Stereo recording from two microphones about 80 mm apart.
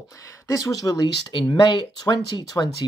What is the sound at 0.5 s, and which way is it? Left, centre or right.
Speech, left.